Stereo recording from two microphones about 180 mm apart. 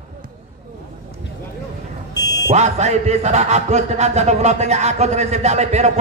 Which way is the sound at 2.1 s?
20° left (ahead or behind).